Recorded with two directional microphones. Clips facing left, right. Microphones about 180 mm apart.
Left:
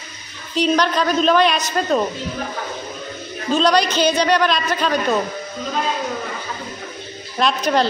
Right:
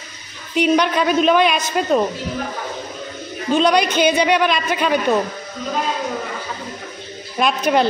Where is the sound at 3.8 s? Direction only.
55° right (ahead or behind).